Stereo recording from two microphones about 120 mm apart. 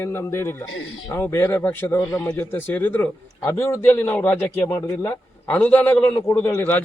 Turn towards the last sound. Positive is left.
turn(degrees=20)  # may be behind; listen again after turning